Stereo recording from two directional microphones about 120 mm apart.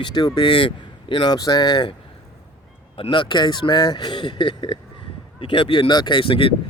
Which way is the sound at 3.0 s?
45° left (ahead or behind).